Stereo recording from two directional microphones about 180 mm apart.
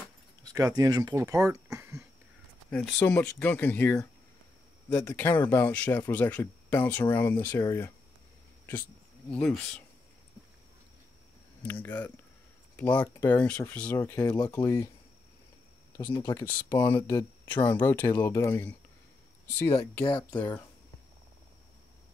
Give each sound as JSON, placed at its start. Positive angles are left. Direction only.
{"t": 0.4, "sound": "speech", "side_deg": -20}
{"t": 1.8, "sound": "a sound", "side_deg": -5}
{"t": 2.7, "sound": "speech", "side_deg": 5}
{"t": 9.3, "sound": "speech", "side_deg": 5}
{"t": 11.6, "sound": "speech", "side_deg": 10}
{"t": 16.2, "sound": "speech", "side_deg": 20}